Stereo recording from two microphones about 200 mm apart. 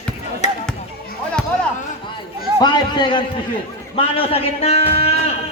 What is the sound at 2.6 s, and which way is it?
A man's voice, 20° left (ahead or behind).